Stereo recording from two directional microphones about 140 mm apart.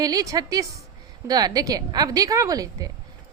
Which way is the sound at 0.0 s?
25° right (ahead or behind).